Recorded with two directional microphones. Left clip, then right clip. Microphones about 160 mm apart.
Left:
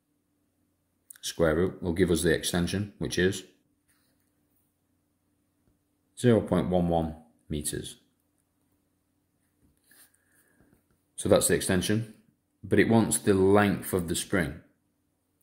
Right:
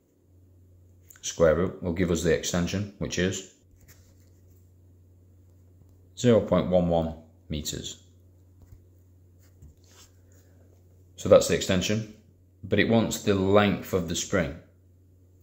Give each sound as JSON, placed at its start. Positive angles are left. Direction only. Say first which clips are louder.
{"t": 1.1, "sound": "speech", "louder": "right 4 dB", "side_deg": 40}
{"t": 6.1, "sound": "speech", "louder": "right 3 dB", "side_deg": 35}
{"t": 11.1, "sound": "speech", "louder": "right 5 dB", "side_deg": 40}